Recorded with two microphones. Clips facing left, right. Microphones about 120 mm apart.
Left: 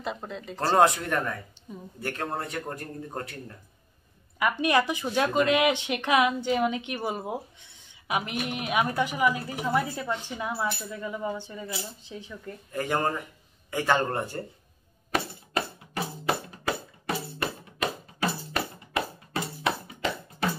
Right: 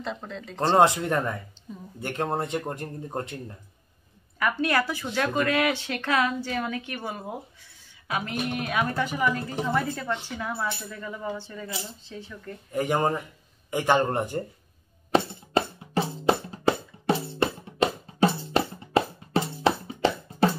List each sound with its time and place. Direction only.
0.0 s speech: 5° left (ahead or behind)
0.7 s a man's voice: 25° right (ahead or behind)
4.4 s speech: 15° left (ahead or behind)
12.7 s a man's voice: 20° right (ahead or behind)
15.1 s music: 25° right (ahead or behind)